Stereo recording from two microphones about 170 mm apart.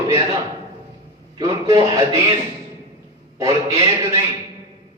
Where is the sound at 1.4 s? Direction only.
20° right (ahead or behind).